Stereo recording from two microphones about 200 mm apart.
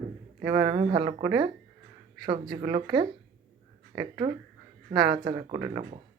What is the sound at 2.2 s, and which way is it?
Speech, 25° right (ahead or behind).